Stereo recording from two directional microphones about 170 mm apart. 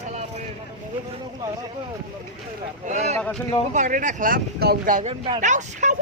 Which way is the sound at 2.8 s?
40° right (ahead or behind).